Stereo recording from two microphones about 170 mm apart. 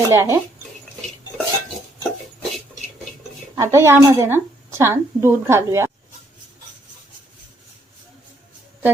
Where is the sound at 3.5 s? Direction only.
15° right (ahead or behind).